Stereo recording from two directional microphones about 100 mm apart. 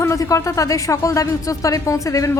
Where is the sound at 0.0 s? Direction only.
30° left (ahead or behind).